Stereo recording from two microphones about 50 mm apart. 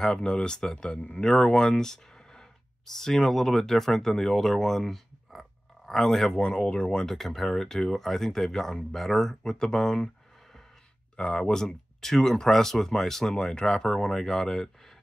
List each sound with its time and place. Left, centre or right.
0.0 s speech: centre
6.3 s speech: centre
7.1 s speech: centre
11.1 s speech: centre